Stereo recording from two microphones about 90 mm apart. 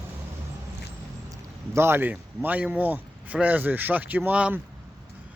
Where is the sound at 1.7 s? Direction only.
25° right (ahead or behind).